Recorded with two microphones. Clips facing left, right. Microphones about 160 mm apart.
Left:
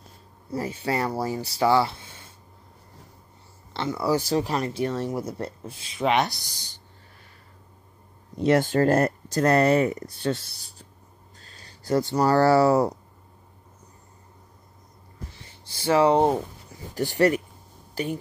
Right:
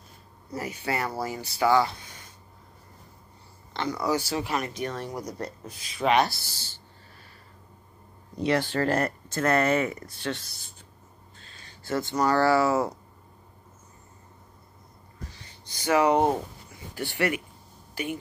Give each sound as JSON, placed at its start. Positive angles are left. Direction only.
{"t": 0.5, "sound": "speech", "side_deg": 30}
{"t": 3.7, "sound": "speech", "side_deg": 25}
{"t": 8.5, "sound": "speech", "side_deg": 45}
{"t": 11.3, "sound": "a sound", "side_deg": 40}
{"t": 11.9, "sound": "speech", "side_deg": 35}
{"t": 15.4, "sound": "speech", "side_deg": 30}
{"t": 16.9, "sound": "speech", "side_deg": 40}